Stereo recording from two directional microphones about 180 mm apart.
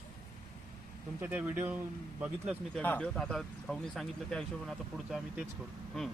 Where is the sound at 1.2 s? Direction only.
10° right (ahead or behind).